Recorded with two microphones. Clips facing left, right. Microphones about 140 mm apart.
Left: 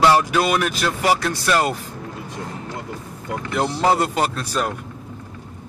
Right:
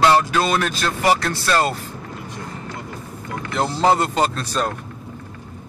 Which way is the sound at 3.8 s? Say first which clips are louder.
Right 2 dB; 10° left (ahead or behind).